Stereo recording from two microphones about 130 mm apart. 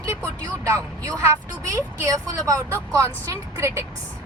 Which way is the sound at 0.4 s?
25° right (ahead or behind).